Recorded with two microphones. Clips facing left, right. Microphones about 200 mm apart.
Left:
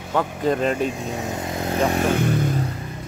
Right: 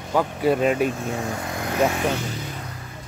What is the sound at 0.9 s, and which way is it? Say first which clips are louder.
Speech: even; 15° left (ahead or behind).